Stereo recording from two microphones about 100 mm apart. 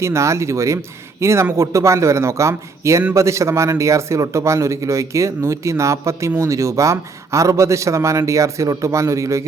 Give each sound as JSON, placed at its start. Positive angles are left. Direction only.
{"t": 0.0, "sound": "a man's voice", "side_deg": -30}